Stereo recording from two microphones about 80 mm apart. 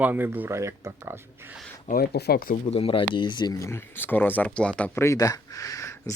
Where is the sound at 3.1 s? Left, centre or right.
Left.